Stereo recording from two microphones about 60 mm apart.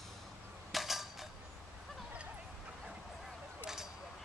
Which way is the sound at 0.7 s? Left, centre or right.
Centre.